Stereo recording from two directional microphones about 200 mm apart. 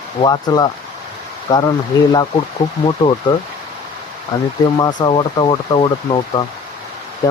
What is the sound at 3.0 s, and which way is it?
Speech, 20° left (ahead or behind).